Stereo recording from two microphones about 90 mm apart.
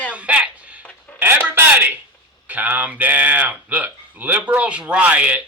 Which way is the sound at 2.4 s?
20° right (ahead or behind).